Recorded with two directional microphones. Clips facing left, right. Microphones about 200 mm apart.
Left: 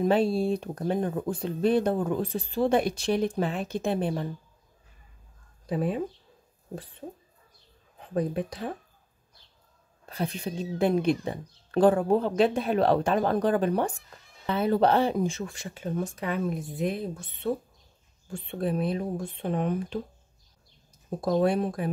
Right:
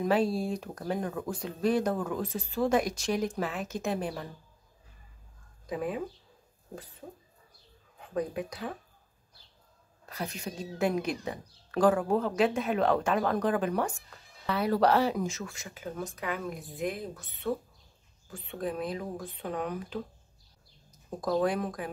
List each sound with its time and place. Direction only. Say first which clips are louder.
0.0 s speech: left 4 dB; 30° left (ahead or behind)
5.7 s speech: left 5 dB; 30° left (ahead or behind)
8.1 s speech: left 4 dB; 30° left (ahead or behind)
10.0 s speech: left 5 dB; 30° left (ahead or behind)
21.2 s speech: left 4 dB; 30° left (ahead or behind)